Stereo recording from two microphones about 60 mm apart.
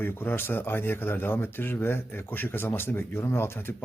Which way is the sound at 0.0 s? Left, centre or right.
Left.